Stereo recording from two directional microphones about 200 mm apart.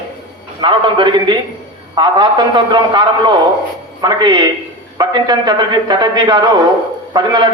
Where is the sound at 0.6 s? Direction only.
25° right (ahead or behind).